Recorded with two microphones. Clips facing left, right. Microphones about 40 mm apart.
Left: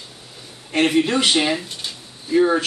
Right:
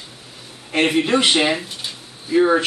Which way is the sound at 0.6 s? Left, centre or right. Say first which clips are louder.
Even; centre.